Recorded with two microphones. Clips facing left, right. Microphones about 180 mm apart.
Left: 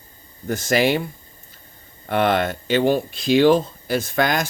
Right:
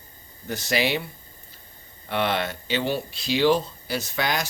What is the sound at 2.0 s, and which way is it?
Speech, 50° left (ahead or behind).